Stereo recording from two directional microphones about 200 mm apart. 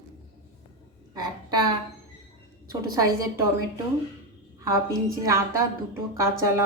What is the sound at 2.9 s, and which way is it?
Speech, 15° right (ahead or behind).